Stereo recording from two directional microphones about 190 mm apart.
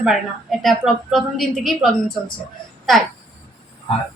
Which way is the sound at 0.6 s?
Centre (ahead or behind).